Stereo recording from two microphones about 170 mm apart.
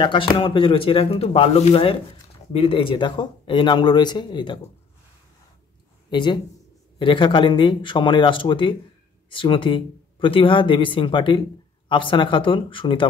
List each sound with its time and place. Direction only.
0.0 s speech: 30° left (ahead or behind)
6.0 s speech: 25° left (ahead or behind)